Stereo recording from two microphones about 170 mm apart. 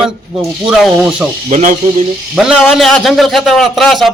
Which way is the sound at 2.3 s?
5° right (ahead or behind).